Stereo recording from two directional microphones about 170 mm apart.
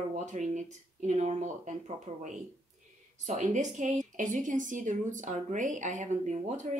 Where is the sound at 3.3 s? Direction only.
45° right (ahead or behind).